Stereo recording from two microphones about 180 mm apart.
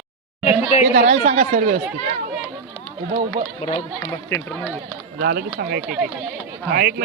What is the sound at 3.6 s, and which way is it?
Speech, 35° left (ahead or behind).